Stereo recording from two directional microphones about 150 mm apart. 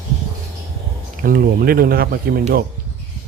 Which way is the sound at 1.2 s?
75° right (ahead or behind).